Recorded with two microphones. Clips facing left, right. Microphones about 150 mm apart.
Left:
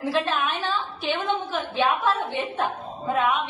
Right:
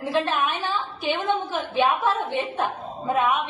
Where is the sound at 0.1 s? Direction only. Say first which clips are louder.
Right 2 dB; 20° right (ahead or behind).